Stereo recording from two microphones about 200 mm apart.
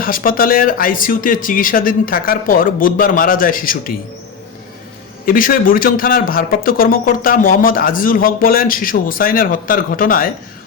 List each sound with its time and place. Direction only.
0.0 s speech: 45° left (ahead or behind)
5.2 s speech: 45° left (ahead or behind)